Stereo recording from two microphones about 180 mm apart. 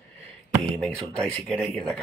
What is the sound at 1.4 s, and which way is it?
Speech, 5° left (ahead or behind).